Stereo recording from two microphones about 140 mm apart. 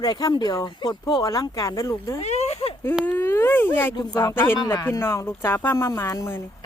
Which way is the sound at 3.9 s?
25° left (ahead or behind).